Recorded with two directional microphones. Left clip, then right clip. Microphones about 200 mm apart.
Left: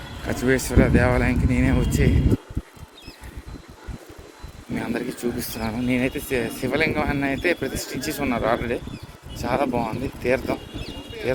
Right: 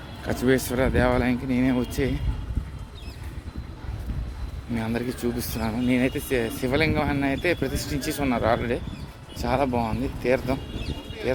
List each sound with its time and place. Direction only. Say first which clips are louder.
0.3 s speech: left 1 dB; 10° right (ahead or behind)
4.8 s speech: left 1 dB; 5° right (ahead or behind)